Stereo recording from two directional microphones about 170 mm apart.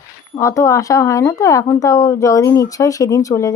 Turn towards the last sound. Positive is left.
turn(degrees=20)  # may be behind; listen again after turning